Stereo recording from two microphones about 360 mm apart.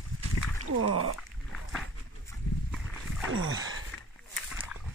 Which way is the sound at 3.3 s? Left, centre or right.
Right.